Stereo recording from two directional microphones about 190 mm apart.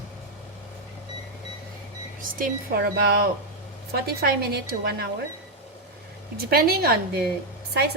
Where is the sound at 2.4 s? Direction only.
55° right (ahead or behind).